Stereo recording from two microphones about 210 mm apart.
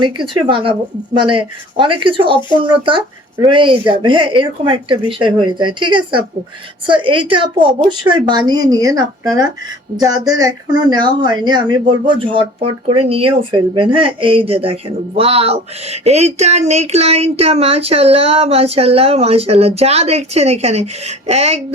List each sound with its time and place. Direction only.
0.0 s speech: 25° right (ahead or behind)